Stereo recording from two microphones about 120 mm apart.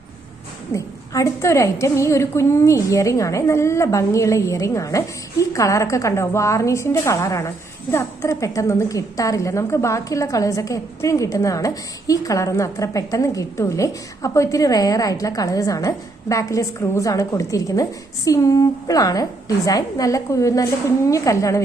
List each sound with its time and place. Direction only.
0.7 s a woman's voice: 25° left (ahead or behind)